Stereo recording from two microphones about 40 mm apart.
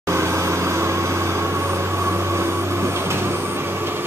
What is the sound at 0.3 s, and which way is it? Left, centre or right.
Vehicle, right.